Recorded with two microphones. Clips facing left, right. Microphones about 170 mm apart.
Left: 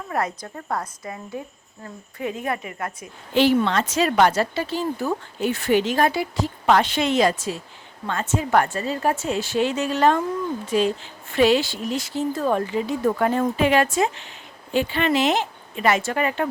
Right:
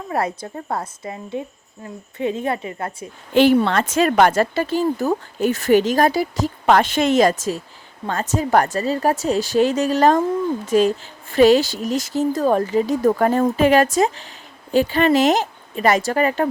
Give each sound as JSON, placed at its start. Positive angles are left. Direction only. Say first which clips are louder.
{"t": 0.1, "sound": "a woman's voice", "louder": "right 3 dB", "side_deg": -30}
{"t": 3.3, "sound": "speech", "louder": "right 4 dB", "side_deg": -50}